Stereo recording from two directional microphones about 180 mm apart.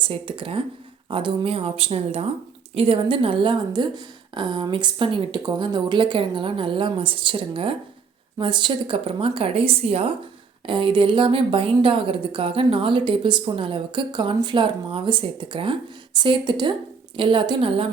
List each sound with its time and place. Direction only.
0.0 s a woman's voice: 30° right (ahead or behind)